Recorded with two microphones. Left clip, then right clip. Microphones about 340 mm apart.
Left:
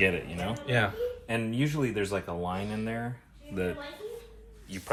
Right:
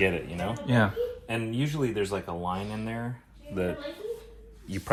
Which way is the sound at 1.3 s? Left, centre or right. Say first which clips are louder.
Left 1 dB; centre.